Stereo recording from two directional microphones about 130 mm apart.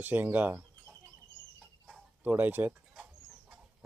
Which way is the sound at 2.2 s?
15° right (ahead or behind).